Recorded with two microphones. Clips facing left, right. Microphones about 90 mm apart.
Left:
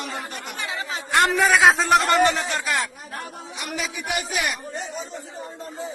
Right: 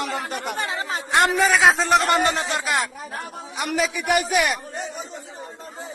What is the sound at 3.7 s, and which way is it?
A man's voice, 60° right (ahead or behind).